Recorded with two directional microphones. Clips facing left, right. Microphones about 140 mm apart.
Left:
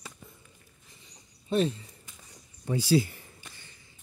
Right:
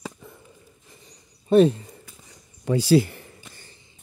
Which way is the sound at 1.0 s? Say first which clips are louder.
Right 8 dB; 60° right (ahead or behind).